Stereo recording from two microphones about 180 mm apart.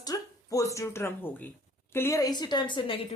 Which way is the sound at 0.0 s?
20° left (ahead or behind).